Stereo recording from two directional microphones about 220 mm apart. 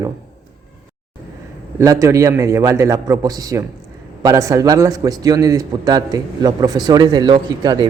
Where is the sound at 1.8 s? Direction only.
15° right (ahead or behind).